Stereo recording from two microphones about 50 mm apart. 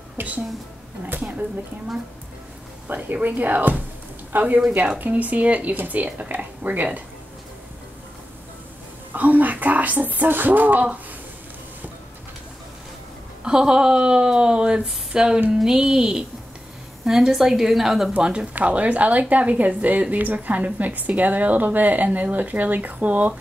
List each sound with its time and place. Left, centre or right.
2.9 s a woman's voice: right
9.1 s speech: right
13.4 s speech: centre
18.1 s a woman's voice: centre